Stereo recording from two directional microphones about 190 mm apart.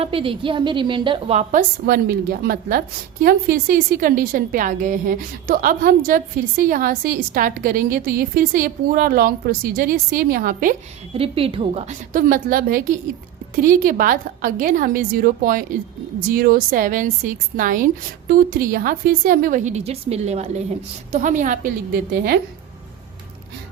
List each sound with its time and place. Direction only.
0.0 s a woman's voice: 30° right (ahead or behind)
1.9 s a woman's voice: 50° right (ahead or behind)
11.1 s a woman's voice: 30° right (ahead or behind)